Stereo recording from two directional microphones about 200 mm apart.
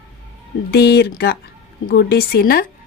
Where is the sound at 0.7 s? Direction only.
55° left (ahead or behind).